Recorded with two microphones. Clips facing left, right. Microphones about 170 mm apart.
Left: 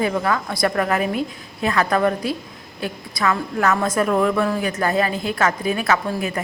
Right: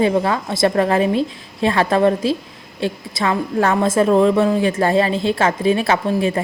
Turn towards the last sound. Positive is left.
turn(degrees=-25)  # may be behind; listen again after turning